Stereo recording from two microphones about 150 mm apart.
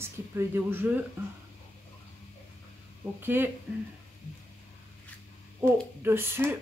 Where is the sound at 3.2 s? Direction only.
15° right (ahead or behind).